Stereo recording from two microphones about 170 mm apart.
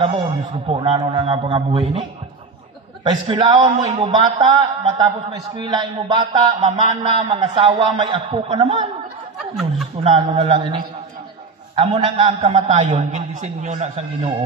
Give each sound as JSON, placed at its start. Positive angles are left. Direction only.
{"t": 0.0, "sound": "a sound", "side_deg": -30}
{"t": 10.0, "sound": "a man's voice", "side_deg": -35}
{"t": 12.4, "sound": "a man's voice", "side_deg": -45}